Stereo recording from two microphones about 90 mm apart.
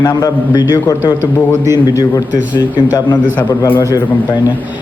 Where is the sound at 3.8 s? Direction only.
40° left (ahead or behind).